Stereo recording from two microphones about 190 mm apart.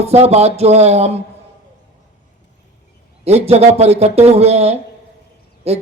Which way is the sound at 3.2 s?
35° right (ahead or behind).